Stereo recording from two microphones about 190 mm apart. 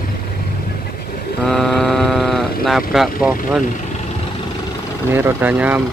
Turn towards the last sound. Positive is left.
turn(degrees=-10)  # may be behind; listen again after turning